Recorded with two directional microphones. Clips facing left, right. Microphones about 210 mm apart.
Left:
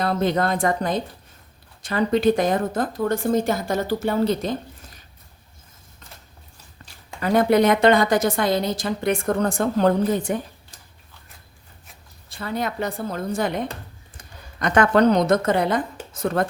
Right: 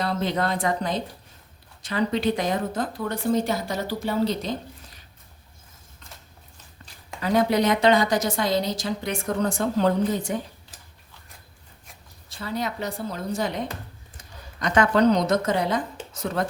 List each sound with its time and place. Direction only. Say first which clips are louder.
0.0 s speech: left 4 dB; 50° left (ahead or behind)
7.2 s a woman's voice: left 4 dB; 55° left (ahead or behind)
10.7 s biting: even; 5° right (ahead or behind)
12.4 s a woman's voice: left 3 dB; 55° left (ahead or behind)